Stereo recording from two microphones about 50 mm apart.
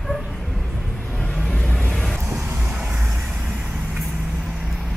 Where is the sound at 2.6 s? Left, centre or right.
Right.